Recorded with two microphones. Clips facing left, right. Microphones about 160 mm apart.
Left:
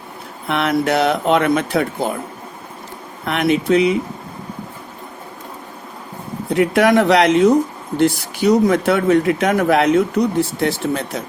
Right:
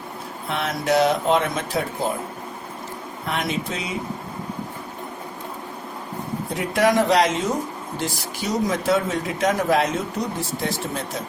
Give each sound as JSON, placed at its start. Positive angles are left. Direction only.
{"t": 0.4, "sound": "speech", "side_deg": 65}
{"t": 3.2, "sound": "speech", "side_deg": 65}
{"t": 6.5, "sound": "speech", "side_deg": 65}